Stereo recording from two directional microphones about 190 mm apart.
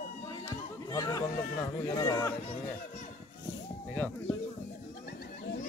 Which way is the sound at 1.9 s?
15° left (ahead or behind).